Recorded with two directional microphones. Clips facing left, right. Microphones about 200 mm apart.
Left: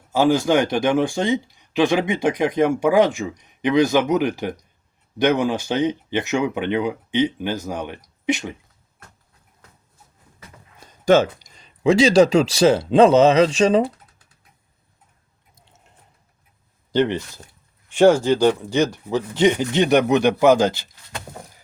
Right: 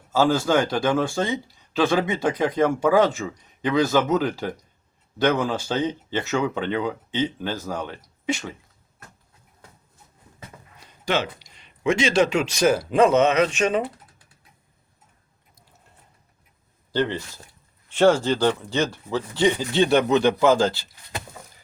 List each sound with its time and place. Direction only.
0.1 s speech: 15° left (ahead or behind)
10.8 s a sound: 45° left (ahead or behind)
11.8 s speech: 35° left (ahead or behind)
15.5 s chewing: 25° left (ahead or behind)
16.9 s speech: 20° left (ahead or behind)